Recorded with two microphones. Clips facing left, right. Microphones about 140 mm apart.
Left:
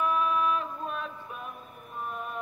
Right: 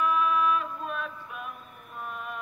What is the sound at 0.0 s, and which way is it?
Music, 30° left (ahead or behind).